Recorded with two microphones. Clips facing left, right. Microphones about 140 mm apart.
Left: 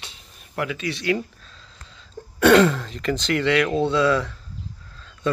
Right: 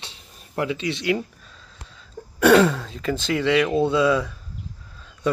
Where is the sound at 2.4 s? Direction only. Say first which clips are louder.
Even; 5° right (ahead or behind).